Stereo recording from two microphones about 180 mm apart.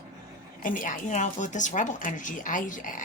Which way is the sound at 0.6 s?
45° left (ahead or behind).